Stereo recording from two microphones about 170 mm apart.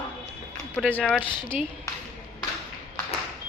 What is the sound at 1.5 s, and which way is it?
Speech, 5° right (ahead or behind).